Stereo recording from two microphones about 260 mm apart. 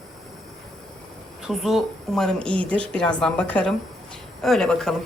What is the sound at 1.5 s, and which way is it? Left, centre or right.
A woman's voice, centre.